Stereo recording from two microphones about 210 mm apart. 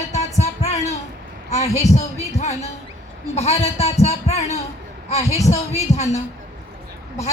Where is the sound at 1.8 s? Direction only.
35° left (ahead or behind).